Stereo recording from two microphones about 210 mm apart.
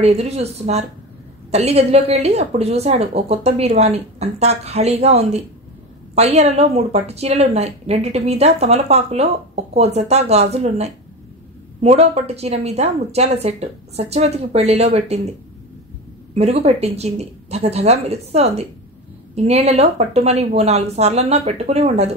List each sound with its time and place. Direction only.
0.0 s a woman's voice: 30° right (ahead or behind)
16.3 s a woman's voice: 30° right (ahead or behind)